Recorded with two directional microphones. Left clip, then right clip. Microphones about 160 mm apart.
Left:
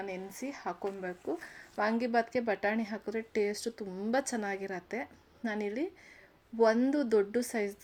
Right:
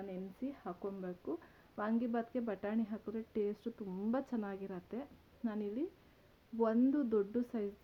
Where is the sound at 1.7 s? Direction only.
5° left (ahead or behind).